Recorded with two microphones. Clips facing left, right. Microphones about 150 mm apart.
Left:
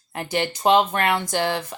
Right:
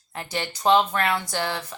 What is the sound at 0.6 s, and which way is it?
Speech, 15° left (ahead or behind).